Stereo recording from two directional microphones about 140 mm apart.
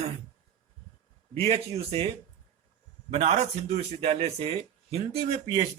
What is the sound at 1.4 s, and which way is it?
Speech, 45° right (ahead or behind).